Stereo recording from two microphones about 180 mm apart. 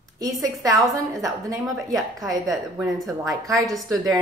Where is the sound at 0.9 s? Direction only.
20° right (ahead or behind).